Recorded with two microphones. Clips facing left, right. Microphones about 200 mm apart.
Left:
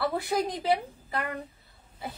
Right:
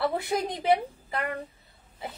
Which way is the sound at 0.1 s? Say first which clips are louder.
Even; 25° right (ahead or behind).